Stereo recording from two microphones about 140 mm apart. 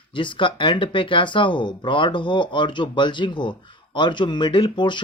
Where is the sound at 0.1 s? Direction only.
35° left (ahead or behind).